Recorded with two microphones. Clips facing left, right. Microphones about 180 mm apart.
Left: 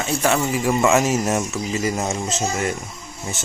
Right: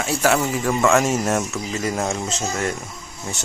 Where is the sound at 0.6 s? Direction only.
10° left (ahead or behind).